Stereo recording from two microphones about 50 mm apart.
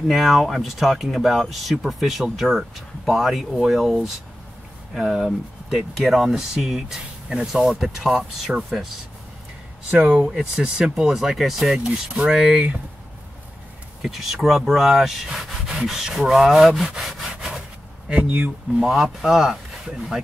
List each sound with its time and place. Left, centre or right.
0.1 s speech: centre
10.1 s speech: centre
11.8 s speech: centre
14.0 s speech: centre; by 18.5 s right
18.8 s speech: centre